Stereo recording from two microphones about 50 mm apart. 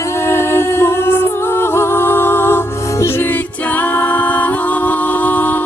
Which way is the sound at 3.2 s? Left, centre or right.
Left.